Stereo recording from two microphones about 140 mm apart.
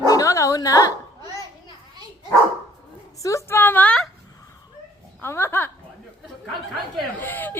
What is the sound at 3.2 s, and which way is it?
Speech, 20° left (ahead or behind).